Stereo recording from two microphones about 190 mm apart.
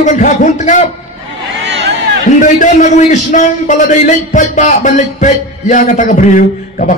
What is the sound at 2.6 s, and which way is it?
A man's voice, 40° left (ahead or behind).